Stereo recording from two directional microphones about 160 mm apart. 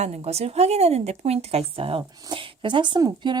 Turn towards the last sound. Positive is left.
turn(degrees=-30)  # may be behind; listen again after turning